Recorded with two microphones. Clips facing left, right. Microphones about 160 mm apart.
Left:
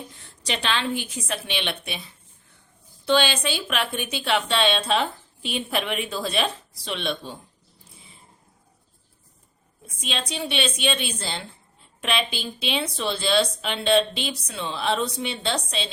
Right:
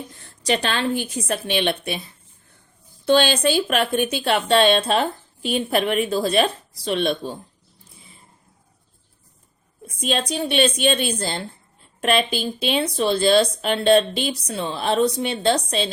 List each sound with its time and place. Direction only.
0.4 s speech: 45° right (ahead or behind)
3.1 s speech: 45° right (ahead or behind)
10.0 s speech: 45° right (ahead or behind)